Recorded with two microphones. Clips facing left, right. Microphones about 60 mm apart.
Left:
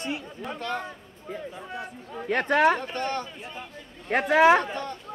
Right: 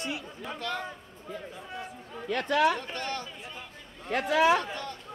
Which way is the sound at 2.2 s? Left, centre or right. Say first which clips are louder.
Left 4 dB; left.